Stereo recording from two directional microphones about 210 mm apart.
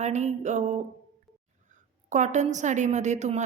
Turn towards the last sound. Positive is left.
turn(degrees=-35)  # may be behind; listen again after turning